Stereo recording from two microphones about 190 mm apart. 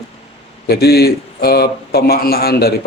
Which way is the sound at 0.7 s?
55° left (ahead or behind).